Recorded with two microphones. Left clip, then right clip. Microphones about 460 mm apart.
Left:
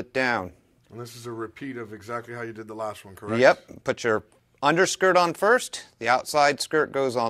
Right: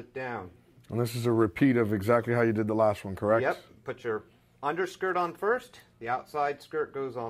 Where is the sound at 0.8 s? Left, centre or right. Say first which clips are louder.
Right 8 dB; right.